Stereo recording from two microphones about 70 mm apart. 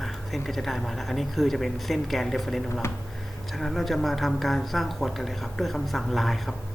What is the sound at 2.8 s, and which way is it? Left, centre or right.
Speech, left.